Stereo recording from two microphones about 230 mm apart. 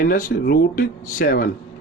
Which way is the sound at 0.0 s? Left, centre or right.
Left.